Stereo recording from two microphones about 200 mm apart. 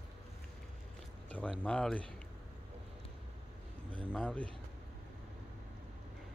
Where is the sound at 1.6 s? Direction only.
5° left (ahead or behind).